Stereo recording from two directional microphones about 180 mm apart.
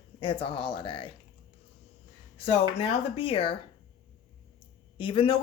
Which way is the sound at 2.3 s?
35° left (ahead or behind).